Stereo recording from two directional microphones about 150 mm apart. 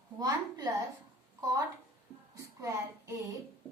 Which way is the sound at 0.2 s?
25° right (ahead or behind).